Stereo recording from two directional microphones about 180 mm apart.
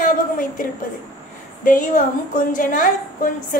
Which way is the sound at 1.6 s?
45° left (ahead or behind).